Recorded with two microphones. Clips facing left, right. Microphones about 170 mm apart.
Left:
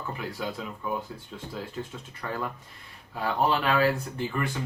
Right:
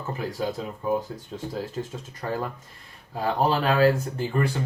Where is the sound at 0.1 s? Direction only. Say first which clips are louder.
Right 7 dB; 40° right (ahead or behind).